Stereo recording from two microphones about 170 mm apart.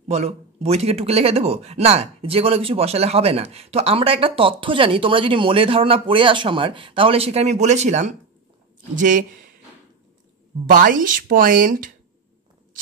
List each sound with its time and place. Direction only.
0.1 s speech: 35° right (ahead or behind)
10.7 s speech: 50° right (ahead or behind)